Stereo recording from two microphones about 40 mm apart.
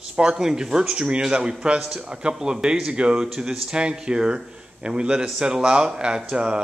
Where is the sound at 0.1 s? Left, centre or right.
Right.